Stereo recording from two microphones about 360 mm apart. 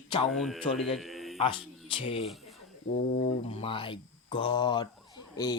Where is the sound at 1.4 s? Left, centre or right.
Centre.